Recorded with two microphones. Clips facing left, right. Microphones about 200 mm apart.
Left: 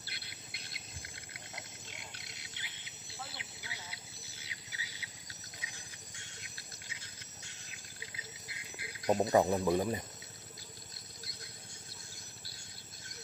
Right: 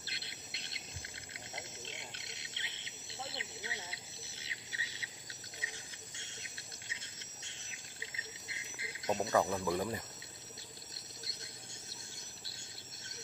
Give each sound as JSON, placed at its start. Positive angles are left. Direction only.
{"t": 0.0, "sound": "cricket", "side_deg": -25}
{"t": 9.1, "sound": "speech", "side_deg": 25}